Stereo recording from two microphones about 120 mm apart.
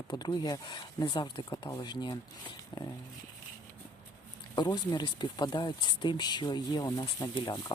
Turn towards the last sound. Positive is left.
turn(degrees=35)  # may be behind; listen again after turning